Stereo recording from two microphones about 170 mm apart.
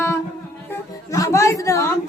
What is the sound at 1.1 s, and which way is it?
Speech, 20° left (ahead or behind).